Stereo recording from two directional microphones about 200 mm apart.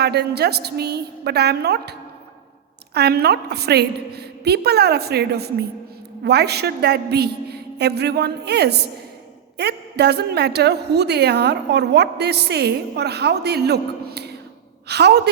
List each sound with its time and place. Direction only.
0.0 s a woman's voice: 55° right (ahead or behind)